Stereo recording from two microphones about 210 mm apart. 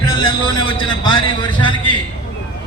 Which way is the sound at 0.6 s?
20° left (ahead or behind).